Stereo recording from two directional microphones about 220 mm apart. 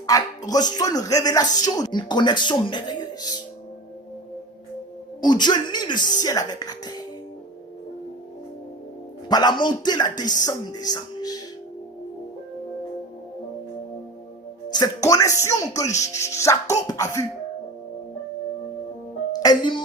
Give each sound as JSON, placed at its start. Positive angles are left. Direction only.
{"t": 0.1, "sound": "speech", "side_deg": 15}
{"t": 5.2, "sound": "speech", "side_deg": 20}
{"t": 9.3, "sound": "speech", "side_deg": 20}
{"t": 14.7, "sound": "speech", "side_deg": 15}
{"t": 19.3, "sound": "music", "side_deg": 20}